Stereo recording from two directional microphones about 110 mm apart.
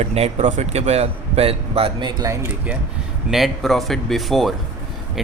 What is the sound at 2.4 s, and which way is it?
Speech, 15° right (ahead or behind).